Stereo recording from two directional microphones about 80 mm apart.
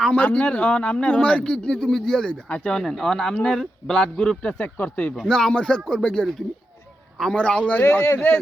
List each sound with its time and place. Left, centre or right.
0.0 s speech: centre
4.5 s speech: left
5.1 s speech: centre